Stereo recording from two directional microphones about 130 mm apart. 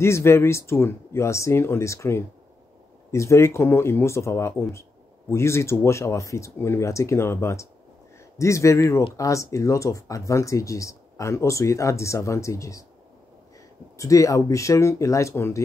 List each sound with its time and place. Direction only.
0.0 s speech: 20° left (ahead or behind)
13.9 s speech: 25° left (ahead or behind)